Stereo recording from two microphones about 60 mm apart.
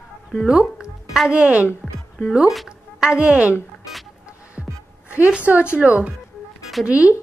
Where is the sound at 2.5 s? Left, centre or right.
Centre.